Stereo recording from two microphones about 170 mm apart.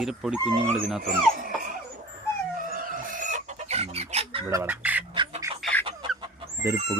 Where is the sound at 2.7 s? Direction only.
50° right (ahead or behind); by 4.4 s 35° right (ahead or behind).